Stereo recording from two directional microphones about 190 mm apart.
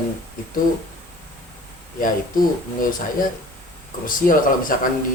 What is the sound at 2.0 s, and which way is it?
A man's voice, 45° left (ahead or behind).